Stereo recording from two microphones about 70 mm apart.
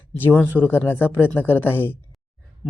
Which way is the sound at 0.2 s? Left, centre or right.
Left.